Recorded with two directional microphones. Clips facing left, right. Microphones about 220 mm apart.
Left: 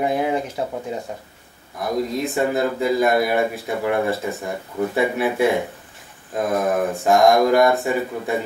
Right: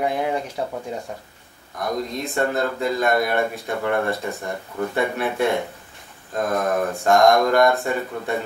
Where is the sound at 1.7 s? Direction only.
5° left (ahead or behind).